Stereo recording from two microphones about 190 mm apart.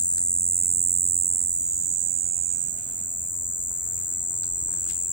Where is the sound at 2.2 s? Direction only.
Centre (ahead or behind).